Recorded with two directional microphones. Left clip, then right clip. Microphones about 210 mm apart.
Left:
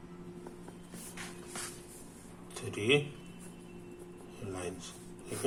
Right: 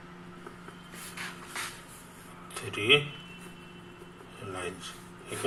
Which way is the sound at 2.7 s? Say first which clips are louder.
Right 5 dB; 15° left (ahead or behind).